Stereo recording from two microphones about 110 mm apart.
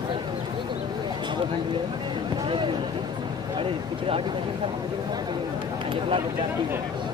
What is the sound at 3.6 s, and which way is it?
Speech, 55° right (ahead or behind).